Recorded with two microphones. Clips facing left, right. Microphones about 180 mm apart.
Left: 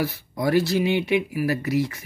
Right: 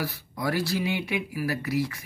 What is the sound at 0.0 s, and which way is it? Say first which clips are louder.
Speech: left 6 dB; 25° left (ahead or behind).